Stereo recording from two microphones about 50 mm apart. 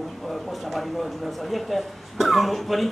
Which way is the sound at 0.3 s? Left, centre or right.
Centre.